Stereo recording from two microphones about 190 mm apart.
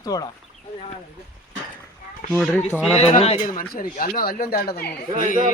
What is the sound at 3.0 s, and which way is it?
Speech, 35° left (ahead or behind).